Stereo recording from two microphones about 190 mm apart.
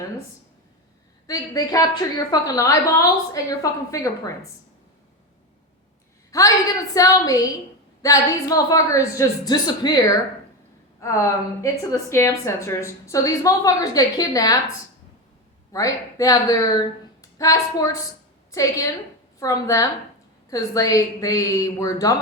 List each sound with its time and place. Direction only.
1.3 s a woman's voice: 20° left (ahead or behind)
6.3 s a woman's voice: 15° left (ahead or behind)
15.7 s a woman's voice: 15° left (ahead or behind)